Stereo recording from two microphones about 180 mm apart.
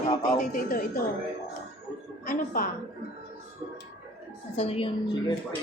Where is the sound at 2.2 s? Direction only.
50° left (ahead or behind).